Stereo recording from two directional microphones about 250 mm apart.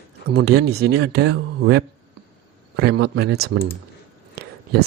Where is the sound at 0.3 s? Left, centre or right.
Right.